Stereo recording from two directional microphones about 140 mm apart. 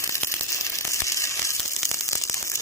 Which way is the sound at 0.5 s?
20° left (ahead or behind).